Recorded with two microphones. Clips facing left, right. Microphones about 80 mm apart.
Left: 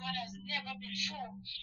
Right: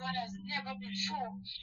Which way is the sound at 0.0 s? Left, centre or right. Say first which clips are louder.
Right 3 dB; right.